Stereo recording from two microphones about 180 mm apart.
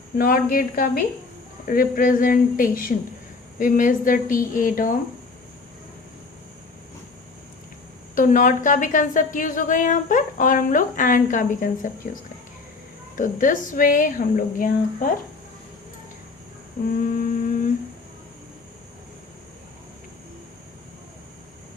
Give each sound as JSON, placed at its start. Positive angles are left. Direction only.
{"t": 0.2, "sound": "a woman's voice", "side_deg": 50}
{"t": 8.1, "sound": "a woman's voice", "side_deg": 45}
{"t": 13.1, "sound": "a woman's voice", "side_deg": 45}
{"t": 17.2, "sound": "humming", "side_deg": 45}